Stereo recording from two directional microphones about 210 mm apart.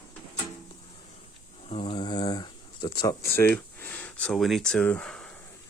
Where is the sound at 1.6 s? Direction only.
25° left (ahead or behind).